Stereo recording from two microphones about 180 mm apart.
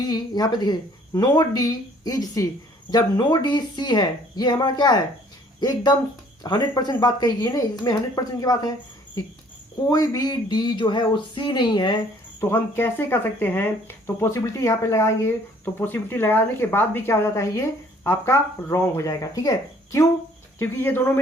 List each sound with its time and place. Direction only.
0.0 s speech: 20° left (ahead or behind)
9.9 s speech: 20° left (ahead or behind)
12.4 s speech: 15° left (ahead or behind)